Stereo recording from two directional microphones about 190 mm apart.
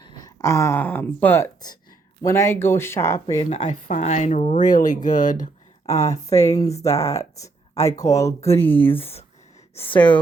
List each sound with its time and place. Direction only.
0.0 s speech: 20° left (ahead or behind)
3.3 s speech: 35° left (ahead or behind)
5.9 s speech: 15° left (ahead or behind)
8.4 s speech: 30° left (ahead or behind)
8.6 s speech: 10° left (ahead or behind)